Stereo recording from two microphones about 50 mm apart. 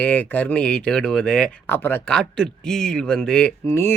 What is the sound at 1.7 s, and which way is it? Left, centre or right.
Speech, left.